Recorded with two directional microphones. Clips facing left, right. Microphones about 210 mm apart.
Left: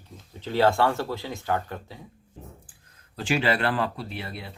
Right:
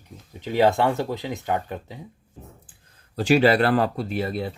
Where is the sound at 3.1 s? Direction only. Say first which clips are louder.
Right 7 dB; 40° right (ahead or behind).